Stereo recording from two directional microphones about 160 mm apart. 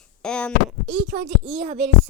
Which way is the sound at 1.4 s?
40° right (ahead or behind).